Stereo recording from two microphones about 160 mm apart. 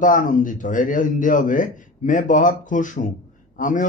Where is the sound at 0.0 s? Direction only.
55° left (ahead or behind).